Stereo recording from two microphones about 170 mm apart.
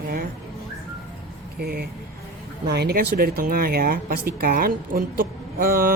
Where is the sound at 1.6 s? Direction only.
65° right (ahead or behind).